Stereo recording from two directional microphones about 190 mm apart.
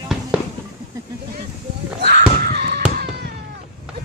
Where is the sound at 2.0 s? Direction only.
60° right (ahead or behind).